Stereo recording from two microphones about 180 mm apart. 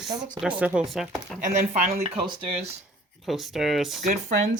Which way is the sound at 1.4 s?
45° right (ahead or behind).